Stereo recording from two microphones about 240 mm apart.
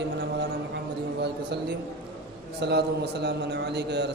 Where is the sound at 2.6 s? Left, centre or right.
Right.